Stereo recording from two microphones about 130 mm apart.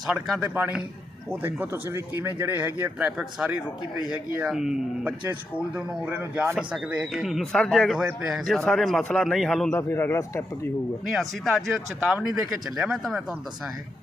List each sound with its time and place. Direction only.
0.1 s a man's voice: 5° right (ahead or behind)
9.7 s speech: 15° left (ahead or behind)
11.1 s a man's voice: centre (ahead or behind)
12.7 s a man's voice: centre (ahead or behind)